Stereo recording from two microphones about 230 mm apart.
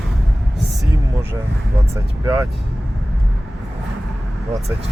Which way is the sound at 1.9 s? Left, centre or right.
Centre.